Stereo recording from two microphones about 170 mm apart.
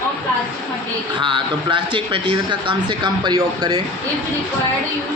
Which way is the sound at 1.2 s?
25° right (ahead or behind).